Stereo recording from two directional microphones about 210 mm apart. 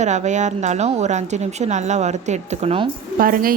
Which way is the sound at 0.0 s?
35° right (ahead or behind).